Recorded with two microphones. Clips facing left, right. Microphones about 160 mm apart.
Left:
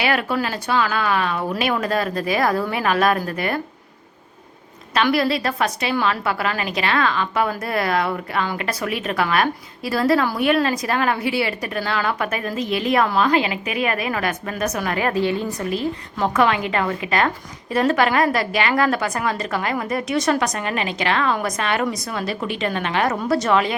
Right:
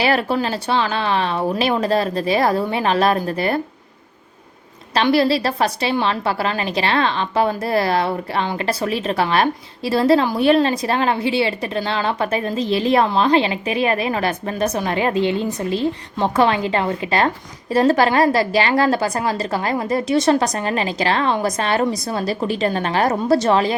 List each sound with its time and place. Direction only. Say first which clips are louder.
0.0 s a woman's voice: right 3 dB; 30° right (ahead or behind)
4.9 s a woman's voice: right 3 dB; 30° right (ahead or behind)